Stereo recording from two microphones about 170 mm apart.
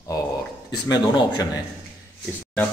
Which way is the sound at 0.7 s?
25° left (ahead or behind).